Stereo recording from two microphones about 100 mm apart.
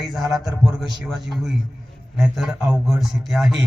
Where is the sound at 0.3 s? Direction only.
Centre (ahead or behind).